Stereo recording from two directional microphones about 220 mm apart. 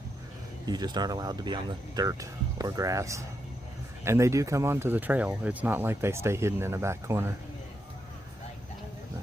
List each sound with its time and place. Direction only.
0.6 s speech: 20° right (ahead or behind)